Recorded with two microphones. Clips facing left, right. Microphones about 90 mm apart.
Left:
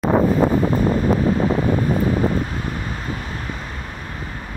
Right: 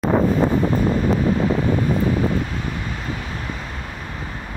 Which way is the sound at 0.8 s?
35° left (ahead or behind).